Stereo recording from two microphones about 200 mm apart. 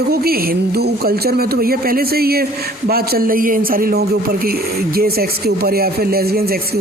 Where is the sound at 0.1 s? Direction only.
50° right (ahead or behind).